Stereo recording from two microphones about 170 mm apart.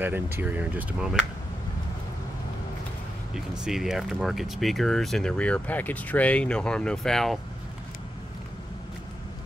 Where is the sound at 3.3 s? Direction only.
5° right (ahead or behind).